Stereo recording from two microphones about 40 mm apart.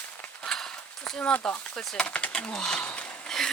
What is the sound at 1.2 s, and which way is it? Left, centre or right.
Speech, left.